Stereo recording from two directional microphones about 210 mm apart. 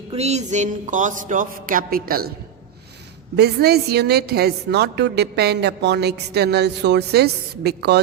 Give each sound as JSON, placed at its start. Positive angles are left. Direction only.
{"t": 0.1, "sound": "speech", "side_deg": -30}
{"t": 3.3, "sound": "a woman's voice", "side_deg": -50}